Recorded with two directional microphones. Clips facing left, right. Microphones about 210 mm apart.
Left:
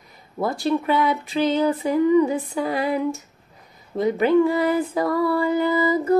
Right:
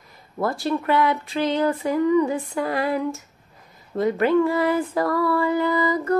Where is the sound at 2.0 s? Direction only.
25° left (ahead or behind).